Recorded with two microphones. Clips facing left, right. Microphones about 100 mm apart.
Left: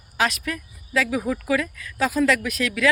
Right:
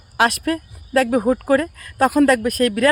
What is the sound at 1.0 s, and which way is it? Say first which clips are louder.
Speech: right 7 dB; 35° right (ahead or behind).